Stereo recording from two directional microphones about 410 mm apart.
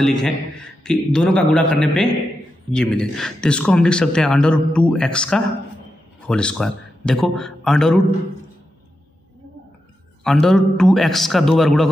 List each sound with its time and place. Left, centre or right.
0.0 s speech: centre
10.2 s speech: centre